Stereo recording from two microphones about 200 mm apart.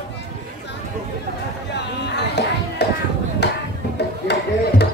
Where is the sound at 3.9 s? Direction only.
55° left (ahead or behind).